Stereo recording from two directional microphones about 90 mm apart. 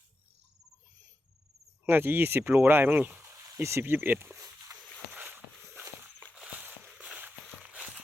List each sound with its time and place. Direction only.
1.8 s speech: 25° right (ahead or behind)
3.4 s speech: 35° right (ahead or behind)
5.1 s walk: 20° right (ahead or behind)
6.3 s a sound: 15° right (ahead or behind)
7.6 s walk: 15° right (ahead or behind)